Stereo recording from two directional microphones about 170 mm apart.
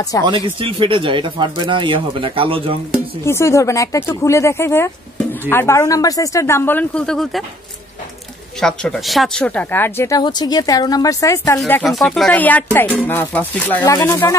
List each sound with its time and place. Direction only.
0.3 s speech: 30° right (ahead or behind)
3.3 s speech: 15° left (ahead or behind)
8.5 s speech: 5° left (ahead or behind)
11.6 s speech: centre (ahead or behind)
13.8 s speech: 20° left (ahead or behind)